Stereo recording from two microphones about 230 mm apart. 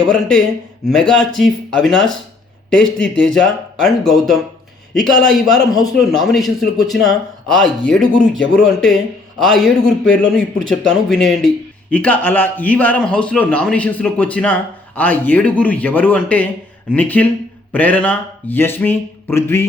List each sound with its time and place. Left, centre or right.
0.1 s a man's voice: centre